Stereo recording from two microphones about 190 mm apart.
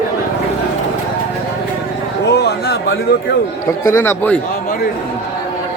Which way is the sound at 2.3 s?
60° left (ahead or behind).